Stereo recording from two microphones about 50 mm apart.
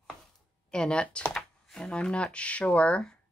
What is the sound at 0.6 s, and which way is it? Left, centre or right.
Speech, centre.